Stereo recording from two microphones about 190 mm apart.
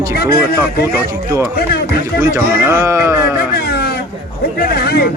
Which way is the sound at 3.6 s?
55° left (ahead or behind).